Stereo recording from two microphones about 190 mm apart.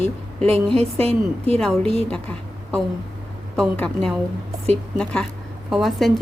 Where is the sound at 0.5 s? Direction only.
30° right (ahead or behind).